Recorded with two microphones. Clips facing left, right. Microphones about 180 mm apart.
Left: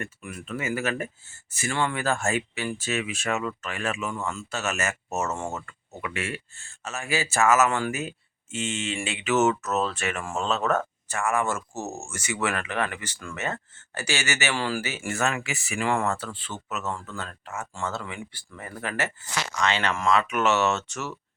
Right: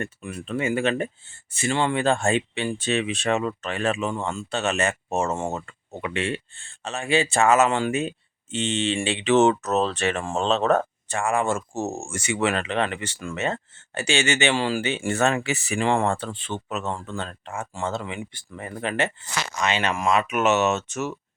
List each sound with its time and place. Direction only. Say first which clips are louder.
0.0 s speech: right 4 dB; 30° right (ahead or behind)